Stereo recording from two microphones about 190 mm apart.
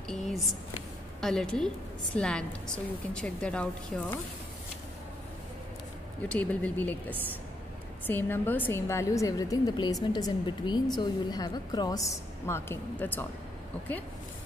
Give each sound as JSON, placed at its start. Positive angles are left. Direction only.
{"t": 0.1, "sound": "a sound", "side_deg": 0}
{"t": 1.2, "sound": "a woman's voice", "side_deg": 5}
{"t": 6.2, "sound": "a woman's voice", "side_deg": 5}